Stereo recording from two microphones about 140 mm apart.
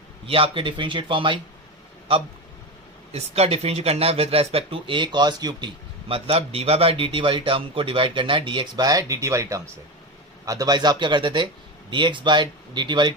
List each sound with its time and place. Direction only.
0.3 s speech: 40° right (ahead or behind)
3.1 s speech: 45° right (ahead or behind)